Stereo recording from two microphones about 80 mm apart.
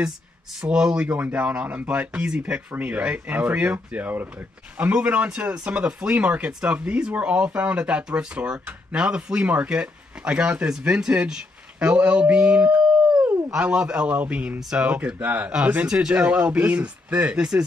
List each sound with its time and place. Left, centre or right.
0.6 s speech: centre
12.7 s howl: right
13.5 s speech: centre